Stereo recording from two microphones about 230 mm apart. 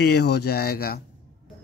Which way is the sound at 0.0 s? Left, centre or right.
Left.